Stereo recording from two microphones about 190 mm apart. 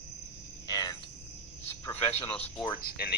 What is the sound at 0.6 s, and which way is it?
Cricket, 20° left (ahead or behind).